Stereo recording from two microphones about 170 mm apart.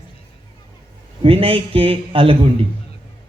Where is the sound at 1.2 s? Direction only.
30° right (ahead or behind).